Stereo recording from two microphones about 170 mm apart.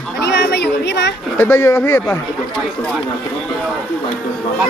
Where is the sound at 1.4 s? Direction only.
15° left (ahead or behind).